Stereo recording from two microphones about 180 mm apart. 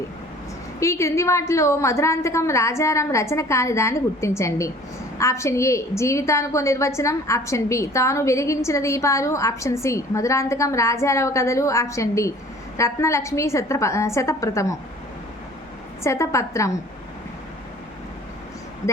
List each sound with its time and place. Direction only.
0.8 s a woman's voice: 15° left (ahead or behind)
16.0 s a woman's voice: 15° left (ahead or behind)